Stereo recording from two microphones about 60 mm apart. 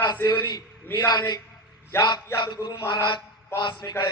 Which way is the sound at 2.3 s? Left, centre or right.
Left.